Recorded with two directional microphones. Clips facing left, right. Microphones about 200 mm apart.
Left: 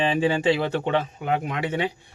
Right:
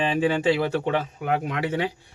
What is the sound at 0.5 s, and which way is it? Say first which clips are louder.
Speech: even; 25° left (ahead or behind).